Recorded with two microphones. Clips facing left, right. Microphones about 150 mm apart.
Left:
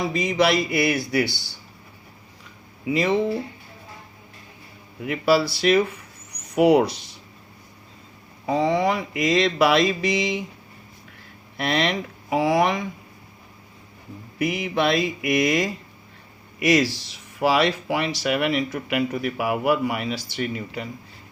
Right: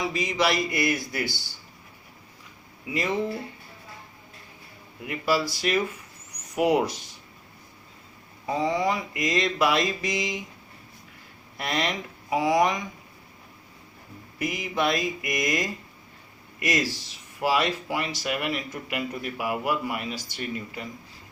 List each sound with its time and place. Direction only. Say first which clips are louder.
0.1 s speech: left 5 dB; 55° left (ahead or behind); by 1.4 s 70° left (ahead or behind)
2.9 s speech: left 7 dB; 75° left (ahead or behind)
5.0 s speech: left 6 dB; 70° left (ahead or behind)
8.4 s speech: left 4 dB; 70° left (ahead or behind)
11.5 s speech: left 5 dB; 70° left (ahead or behind)
14.3 s speech: left 5 dB; 65° left (ahead or behind)